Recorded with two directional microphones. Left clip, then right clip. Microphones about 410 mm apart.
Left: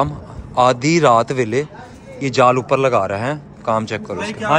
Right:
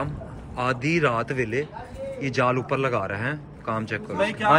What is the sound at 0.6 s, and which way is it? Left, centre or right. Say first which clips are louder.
A man's voice: left 10 dB; centre.